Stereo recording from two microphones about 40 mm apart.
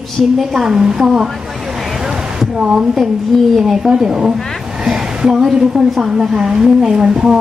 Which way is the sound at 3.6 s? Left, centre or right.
Centre.